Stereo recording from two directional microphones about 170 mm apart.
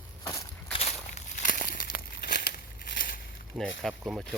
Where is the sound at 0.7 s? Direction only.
40° left (ahead or behind); by 3.4 s 60° left (ahead or behind).